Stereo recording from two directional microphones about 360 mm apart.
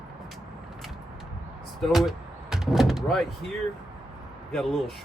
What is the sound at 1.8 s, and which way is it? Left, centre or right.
Speech, centre.